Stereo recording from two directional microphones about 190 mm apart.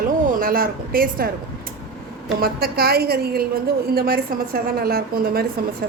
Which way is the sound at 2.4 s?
55° right (ahead or behind).